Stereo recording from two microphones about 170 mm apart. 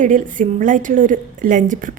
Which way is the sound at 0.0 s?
50° right (ahead or behind).